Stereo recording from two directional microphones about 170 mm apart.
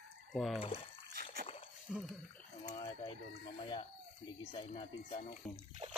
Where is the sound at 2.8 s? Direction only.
30° left (ahead or behind).